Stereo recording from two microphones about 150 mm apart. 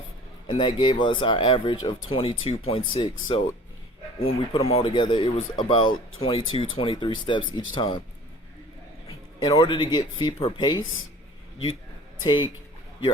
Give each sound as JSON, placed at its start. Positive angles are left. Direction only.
{"t": 0.4, "sound": "speech", "side_deg": 30}
{"t": 4.5, "sound": "speech", "side_deg": 40}
{"t": 9.5, "sound": "speech", "side_deg": 35}
{"t": 12.2, "sound": "speech", "side_deg": 30}